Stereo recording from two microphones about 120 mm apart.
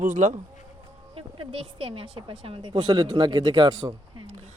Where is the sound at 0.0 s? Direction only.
90° right.